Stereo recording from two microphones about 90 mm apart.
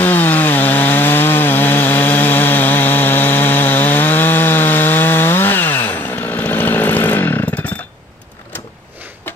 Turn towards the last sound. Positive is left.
turn(degrees=15)  # may be behind; listen again after turning